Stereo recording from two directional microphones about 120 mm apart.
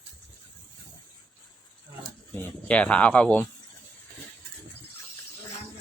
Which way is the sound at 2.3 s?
10° left (ahead or behind).